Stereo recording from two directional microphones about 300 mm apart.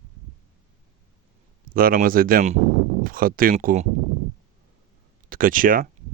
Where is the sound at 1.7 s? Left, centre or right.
Right.